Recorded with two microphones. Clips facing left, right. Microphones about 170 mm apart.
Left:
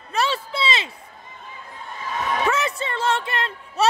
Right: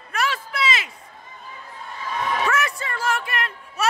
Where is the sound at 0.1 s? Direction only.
30° left (ahead or behind).